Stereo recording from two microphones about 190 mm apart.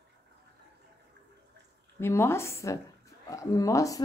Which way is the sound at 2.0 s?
15° left (ahead or behind).